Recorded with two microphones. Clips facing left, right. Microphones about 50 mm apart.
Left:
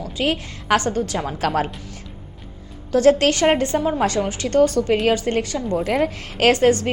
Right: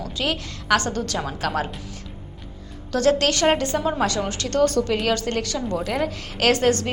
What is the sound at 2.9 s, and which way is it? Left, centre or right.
Speech, left.